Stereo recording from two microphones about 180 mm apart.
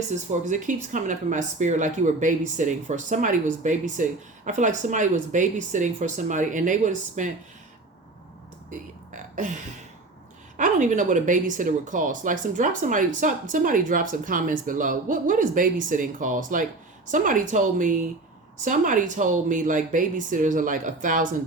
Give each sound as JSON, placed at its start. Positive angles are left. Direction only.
{"t": 0.3, "sound": "speech", "side_deg": -45}
{"t": 9.1, "sound": "a sound", "side_deg": -45}
{"t": 10.6, "sound": "speech", "side_deg": -45}